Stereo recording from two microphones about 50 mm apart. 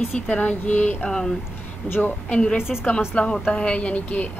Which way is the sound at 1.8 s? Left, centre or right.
Left.